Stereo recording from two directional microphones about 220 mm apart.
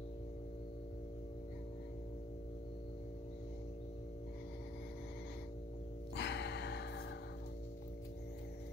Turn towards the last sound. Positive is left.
turn(degrees=50)  # may be behind; listen again after turning